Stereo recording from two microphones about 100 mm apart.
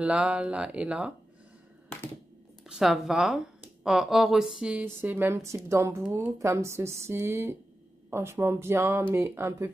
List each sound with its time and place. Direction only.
0.0 s speech: 10° right (ahead or behind)
2.6 s speech: 5° right (ahead or behind)
4.8 s speech: 20° right (ahead or behind)